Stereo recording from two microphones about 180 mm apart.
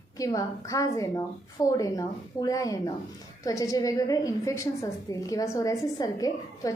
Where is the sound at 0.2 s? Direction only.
20° left (ahead or behind).